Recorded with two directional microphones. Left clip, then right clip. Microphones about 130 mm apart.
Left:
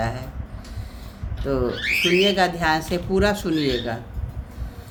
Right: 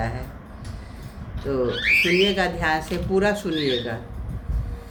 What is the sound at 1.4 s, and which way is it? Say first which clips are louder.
Speech: right 2 dB; 55° left (ahead or behind).